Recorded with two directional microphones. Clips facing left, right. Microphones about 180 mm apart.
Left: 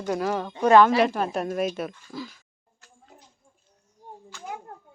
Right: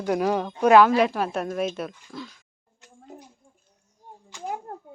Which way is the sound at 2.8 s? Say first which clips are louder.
Right 5 dB; 20° right (ahead or behind).